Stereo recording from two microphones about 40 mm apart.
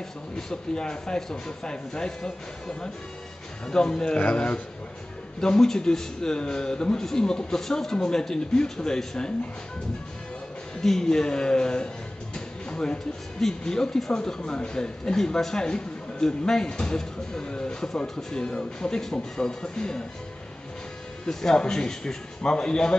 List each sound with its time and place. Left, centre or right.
0.4 s a man's voice: centre
3.6 s speech: left
5.4 s a man's voice: centre
10.8 s a man's voice: centre
21.3 s speech: centre